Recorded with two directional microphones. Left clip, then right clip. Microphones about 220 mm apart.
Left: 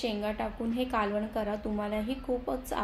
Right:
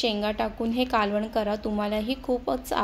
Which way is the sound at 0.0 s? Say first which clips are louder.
Right 6 dB; 35° right (ahead or behind).